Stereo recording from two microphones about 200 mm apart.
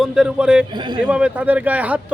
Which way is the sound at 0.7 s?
20° right (ahead or behind).